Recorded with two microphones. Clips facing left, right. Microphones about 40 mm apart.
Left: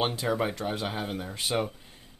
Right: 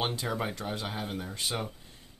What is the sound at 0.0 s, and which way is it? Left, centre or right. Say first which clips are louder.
Speech: left 4 dB; centre.